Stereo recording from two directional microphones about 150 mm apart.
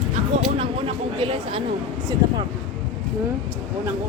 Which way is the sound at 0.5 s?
40° right (ahead or behind).